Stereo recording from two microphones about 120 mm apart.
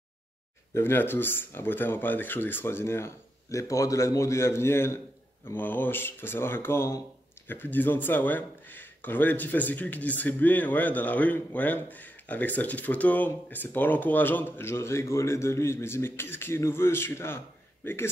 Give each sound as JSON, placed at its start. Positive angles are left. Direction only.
{"t": 0.7, "sound": "speech", "side_deg": 20}